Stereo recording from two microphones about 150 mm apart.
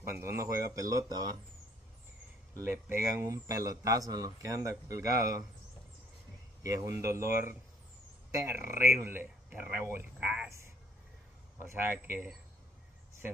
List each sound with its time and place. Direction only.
0.0 s speech: 20° right (ahead or behind)
2.6 s speech: 15° right (ahead or behind)
6.6 s a man's voice: 20° right (ahead or behind)
11.7 s a man's voice: 15° right (ahead or behind)